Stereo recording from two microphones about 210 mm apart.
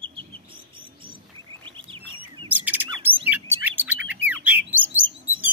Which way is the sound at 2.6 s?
10° right (ahead or behind).